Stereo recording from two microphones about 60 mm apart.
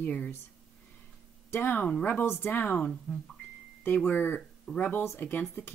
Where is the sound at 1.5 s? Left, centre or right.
Left.